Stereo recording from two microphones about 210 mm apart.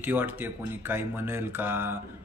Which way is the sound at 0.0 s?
10° right (ahead or behind).